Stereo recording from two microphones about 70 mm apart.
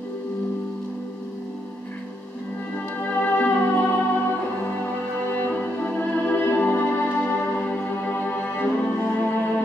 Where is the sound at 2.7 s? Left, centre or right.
Left.